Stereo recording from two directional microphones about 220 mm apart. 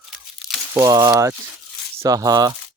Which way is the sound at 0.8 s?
15° right (ahead or behind).